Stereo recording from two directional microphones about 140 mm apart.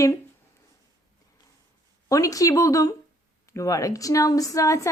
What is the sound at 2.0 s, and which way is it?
A woman's voice, 25° left (ahead or behind).